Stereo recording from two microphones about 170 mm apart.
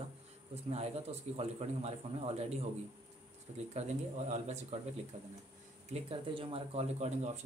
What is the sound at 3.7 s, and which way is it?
Speech, 40° right (ahead or behind).